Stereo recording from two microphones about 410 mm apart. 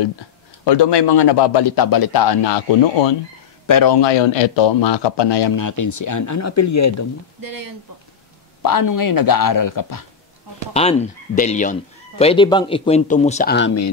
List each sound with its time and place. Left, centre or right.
0.7 s a man's voice: left
3.6 s a man's voice: left
5.6 s speech: left
7.4 s speech: right
8.6 s speech: left
10.7 s speech: centre